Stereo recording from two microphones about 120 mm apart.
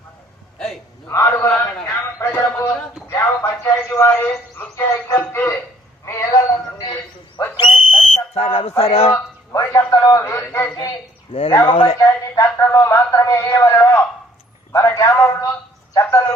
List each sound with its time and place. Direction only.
1.0 s a sound: 25° left (ahead or behind)
5.0 s music: 20° left (ahead or behind)
6.1 s whistle: 25° left (ahead or behind); by 8.7 s 50° left (ahead or behind)
8.8 s a man's voice: 55° left (ahead or behind)
9.1 s a sound: 25° left (ahead or behind)
11.3 s a man's voice: 50° left (ahead or behind)
11.9 s speech: 25° left (ahead or behind)
14.7 s a sound: 25° left (ahead or behind)
16.0 s music: 25° left (ahead or behind)